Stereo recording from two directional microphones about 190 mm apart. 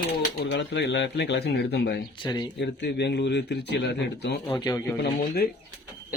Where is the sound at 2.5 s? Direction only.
65° left (ahead or behind).